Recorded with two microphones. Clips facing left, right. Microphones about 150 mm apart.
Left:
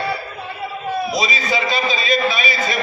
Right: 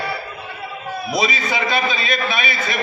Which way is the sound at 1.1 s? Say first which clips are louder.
Even; 55° right (ahead or behind).